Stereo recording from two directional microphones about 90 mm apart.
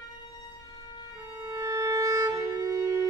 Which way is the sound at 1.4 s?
35° right (ahead or behind).